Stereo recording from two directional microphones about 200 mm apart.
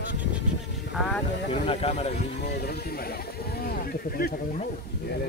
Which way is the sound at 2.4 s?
50° left (ahead or behind).